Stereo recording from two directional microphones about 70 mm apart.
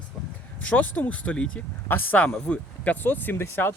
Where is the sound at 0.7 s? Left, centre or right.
Left.